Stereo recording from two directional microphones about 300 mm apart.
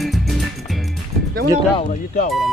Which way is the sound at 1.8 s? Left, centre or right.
Left.